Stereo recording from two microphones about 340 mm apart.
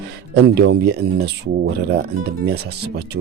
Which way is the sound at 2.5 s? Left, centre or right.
Right.